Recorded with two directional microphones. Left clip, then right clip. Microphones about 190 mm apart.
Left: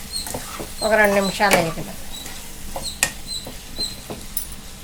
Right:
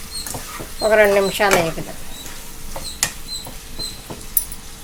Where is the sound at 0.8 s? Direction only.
45° right (ahead or behind).